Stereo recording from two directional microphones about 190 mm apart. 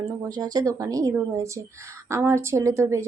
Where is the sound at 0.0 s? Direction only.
20° right (ahead or behind).